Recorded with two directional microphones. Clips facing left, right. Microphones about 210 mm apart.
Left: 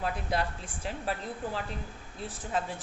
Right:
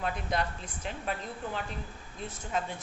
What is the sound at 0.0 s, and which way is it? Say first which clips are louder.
A woman's voice: left 1 dB; 30° left (ahead or behind).